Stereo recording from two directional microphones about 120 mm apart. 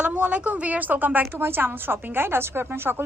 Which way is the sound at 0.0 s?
10° right (ahead or behind).